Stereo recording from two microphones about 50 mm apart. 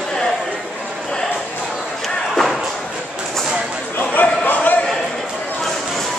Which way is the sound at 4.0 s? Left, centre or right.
Left.